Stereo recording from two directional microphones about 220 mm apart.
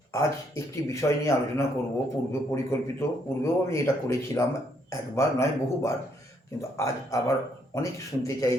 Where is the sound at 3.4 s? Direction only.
15° left (ahead or behind).